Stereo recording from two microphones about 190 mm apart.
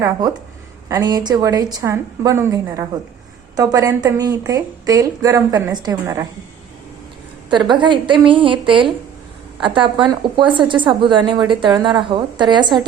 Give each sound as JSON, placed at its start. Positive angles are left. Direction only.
{"t": 0.0, "sound": "a woman's voice", "side_deg": -20}
{"t": 7.7, "sound": "a woman's voice", "side_deg": -25}